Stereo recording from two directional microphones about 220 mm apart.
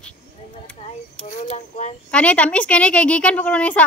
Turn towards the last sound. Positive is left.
turn(degrees=5)  # may be behind; listen again after turning